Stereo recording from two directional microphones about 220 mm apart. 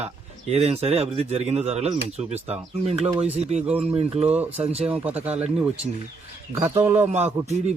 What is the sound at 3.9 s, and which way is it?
Speech, 30° right (ahead or behind).